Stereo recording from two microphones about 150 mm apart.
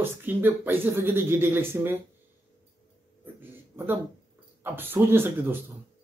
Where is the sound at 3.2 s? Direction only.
15° right (ahead or behind).